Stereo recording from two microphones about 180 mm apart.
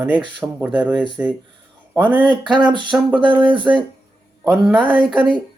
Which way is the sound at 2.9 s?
5° right (ahead or behind).